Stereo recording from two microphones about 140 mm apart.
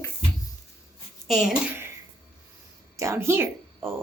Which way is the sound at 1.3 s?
5° right (ahead or behind).